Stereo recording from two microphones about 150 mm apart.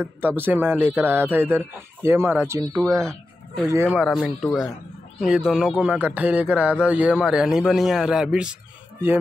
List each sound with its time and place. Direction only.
0.4 s speech: 10° right (ahead or behind)
4.1 s speech: centre (ahead or behind)